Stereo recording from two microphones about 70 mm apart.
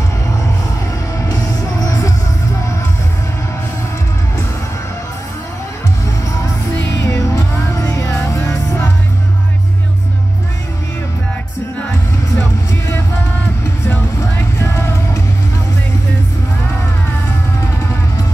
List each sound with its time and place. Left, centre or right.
7.0 s music: left